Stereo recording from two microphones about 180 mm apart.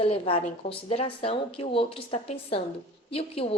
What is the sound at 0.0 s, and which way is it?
A woman's voice, 35° left (ahead or behind).